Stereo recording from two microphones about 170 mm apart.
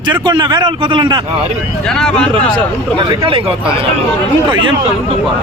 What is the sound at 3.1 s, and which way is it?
A man's voice, 30° right (ahead or behind).